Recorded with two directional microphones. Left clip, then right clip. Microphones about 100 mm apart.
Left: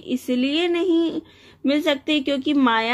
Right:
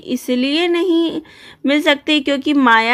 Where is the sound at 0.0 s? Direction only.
30° right (ahead or behind).